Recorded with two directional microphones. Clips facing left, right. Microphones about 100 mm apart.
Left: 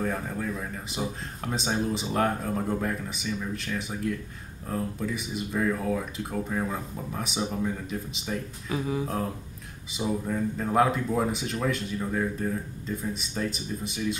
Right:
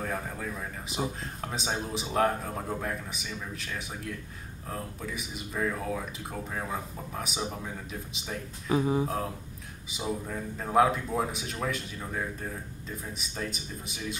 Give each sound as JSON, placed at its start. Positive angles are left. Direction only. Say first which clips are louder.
{"t": 0.0, "sound": "speech", "louder": "left 4 dB", "side_deg": 0}
{"t": 8.6, "sound": "speech", "louder": "right 4 dB", "side_deg": -30}
{"t": 9.0, "sound": "speech", "louder": "left 1 dB", "side_deg": -5}